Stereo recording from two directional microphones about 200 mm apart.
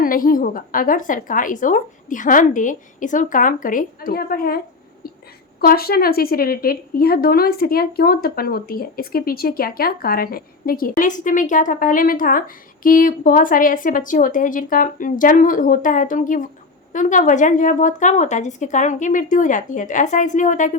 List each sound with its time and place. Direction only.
0.0 s a woman's voice: 45° left (ahead or behind)